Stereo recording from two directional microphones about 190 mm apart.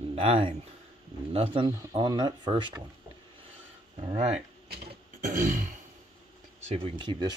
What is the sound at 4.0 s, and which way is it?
Speech, 30° right (ahead or behind).